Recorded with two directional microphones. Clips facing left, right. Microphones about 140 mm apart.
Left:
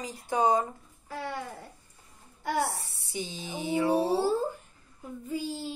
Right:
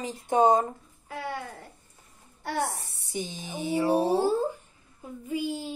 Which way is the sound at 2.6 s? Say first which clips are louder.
Right 1 dB; 20° right (ahead or behind).